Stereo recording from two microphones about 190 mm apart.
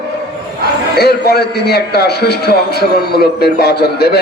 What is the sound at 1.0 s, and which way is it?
A man's voice, 60° left (ahead or behind).